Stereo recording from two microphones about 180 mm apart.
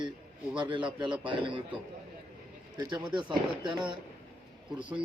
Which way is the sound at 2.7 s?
25° right (ahead or behind).